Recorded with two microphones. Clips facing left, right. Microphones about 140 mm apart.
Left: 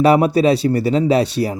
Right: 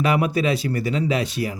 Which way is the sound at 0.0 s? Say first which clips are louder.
Left 8 dB; 35° left (ahead or behind).